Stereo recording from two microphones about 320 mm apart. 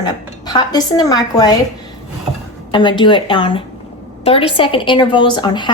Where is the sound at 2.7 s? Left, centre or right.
Centre.